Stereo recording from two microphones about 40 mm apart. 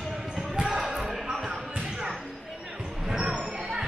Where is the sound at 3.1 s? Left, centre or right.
Centre.